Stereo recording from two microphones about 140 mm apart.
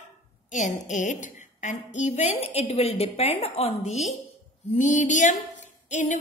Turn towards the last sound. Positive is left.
turn(degrees=60)  # may be behind; listen again after turning